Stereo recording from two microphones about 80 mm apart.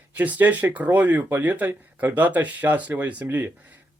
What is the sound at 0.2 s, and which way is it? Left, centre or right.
Speech, right.